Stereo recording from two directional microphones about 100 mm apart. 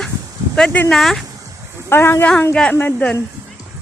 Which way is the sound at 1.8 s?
25° left (ahead or behind).